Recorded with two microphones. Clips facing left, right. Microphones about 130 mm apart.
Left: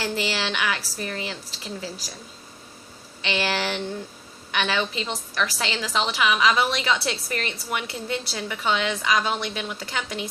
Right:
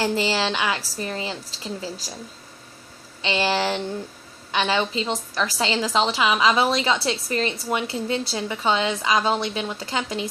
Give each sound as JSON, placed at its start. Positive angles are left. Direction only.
{"t": 0.0, "sound": "a woman's voice", "side_deg": -30}
{"t": 3.2, "sound": "a woman's voice", "side_deg": -25}